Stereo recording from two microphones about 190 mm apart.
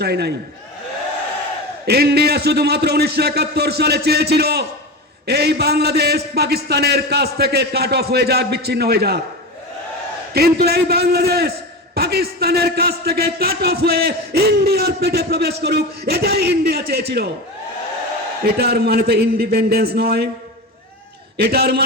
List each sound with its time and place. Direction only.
0.0 s a man's voice: 60° right (ahead or behind)
1.9 s a man's voice: 55° right (ahead or behind)
10.3 s a man's voice: 55° right (ahead or behind)
18.4 s a man's voice: 55° right (ahead or behind)
21.3 s a man's voice: 55° right (ahead or behind)